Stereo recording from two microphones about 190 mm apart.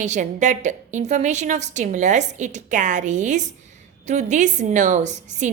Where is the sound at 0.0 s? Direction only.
40° right (ahead or behind).